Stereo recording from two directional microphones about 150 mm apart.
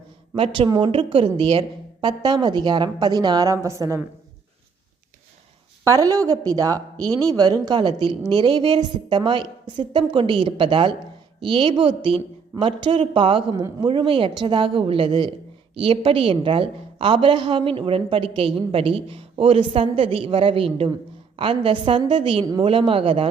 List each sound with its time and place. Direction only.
0.3 s a woman's voice: 40° right (ahead or behind); by 4.0 s 20° right (ahead or behind)
5.8 s a woman's voice: 20° right (ahead or behind); by 23.3 s 40° right (ahead or behind)